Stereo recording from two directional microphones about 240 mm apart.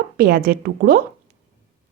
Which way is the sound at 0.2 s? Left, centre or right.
Right.